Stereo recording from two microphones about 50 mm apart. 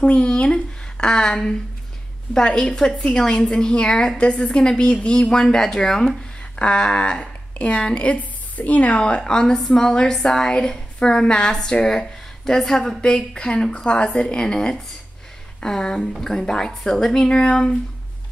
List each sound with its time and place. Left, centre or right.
0.0 s speech: centre
7.5 s a woman's voice: left